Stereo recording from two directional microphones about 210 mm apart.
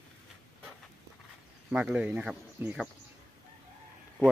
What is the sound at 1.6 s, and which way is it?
Speech, 5° right (ahead or behind).